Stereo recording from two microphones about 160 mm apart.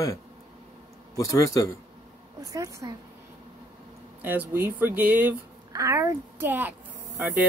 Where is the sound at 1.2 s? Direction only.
20° left (ahead or behind).